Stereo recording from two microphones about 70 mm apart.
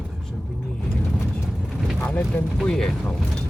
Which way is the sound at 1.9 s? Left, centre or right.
Left.